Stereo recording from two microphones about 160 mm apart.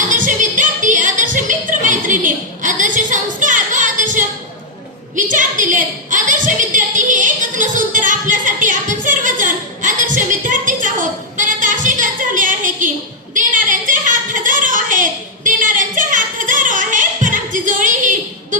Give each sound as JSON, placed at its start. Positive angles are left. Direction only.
{"t": 0.1, "sound": "music", "side_deg": -55}
{"t": 5.1, "sound": "a sound", "side_deg": -55}
{"t": 15.4, "sound": "music", "side_deg": -55}